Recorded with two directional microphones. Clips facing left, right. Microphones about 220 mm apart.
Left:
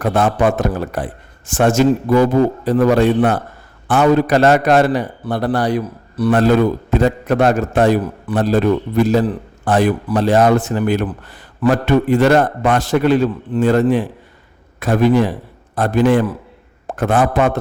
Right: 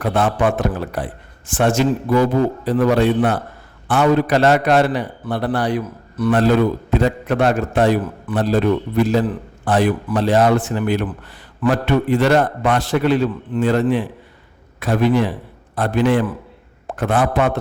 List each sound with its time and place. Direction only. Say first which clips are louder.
0.0 s a man's voice: left 3 dB; 45° left (ahead or behind)